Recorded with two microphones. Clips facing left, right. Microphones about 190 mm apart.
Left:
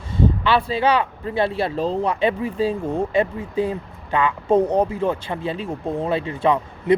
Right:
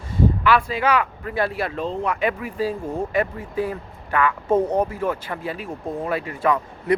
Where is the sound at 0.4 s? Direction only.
30° left (ahead or behind).